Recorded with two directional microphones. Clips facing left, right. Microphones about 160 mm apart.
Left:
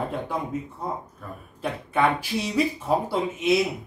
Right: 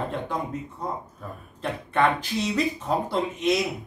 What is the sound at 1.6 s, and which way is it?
Speech, 10° left (ahead or behind).